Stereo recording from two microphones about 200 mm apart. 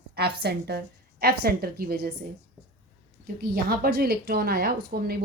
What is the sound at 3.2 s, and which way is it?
A woman's voice, 50° right (ahead or behind).